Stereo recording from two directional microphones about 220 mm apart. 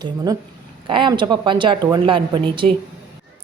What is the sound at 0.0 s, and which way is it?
Speech, 15° right (ahead or behind).